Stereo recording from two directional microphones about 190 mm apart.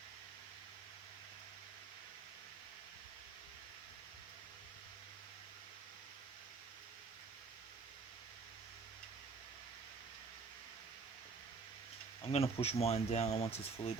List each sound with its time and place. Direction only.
12.3 s speech: 30° left (ahead or behind)